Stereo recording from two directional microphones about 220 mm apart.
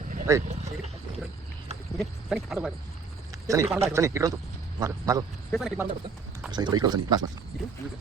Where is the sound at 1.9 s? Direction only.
Centre (ahead or behind).